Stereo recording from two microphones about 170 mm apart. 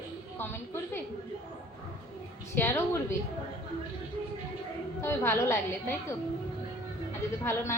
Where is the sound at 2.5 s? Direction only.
15° left (ahead or behind).